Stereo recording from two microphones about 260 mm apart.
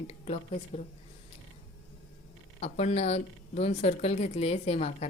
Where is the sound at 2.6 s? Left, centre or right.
Left.